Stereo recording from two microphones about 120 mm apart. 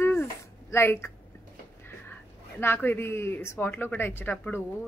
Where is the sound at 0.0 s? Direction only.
20° left (ahead or behind).